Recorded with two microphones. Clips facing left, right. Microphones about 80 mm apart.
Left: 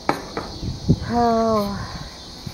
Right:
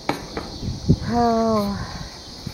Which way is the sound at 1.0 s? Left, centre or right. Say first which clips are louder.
Left 1 dB; centre.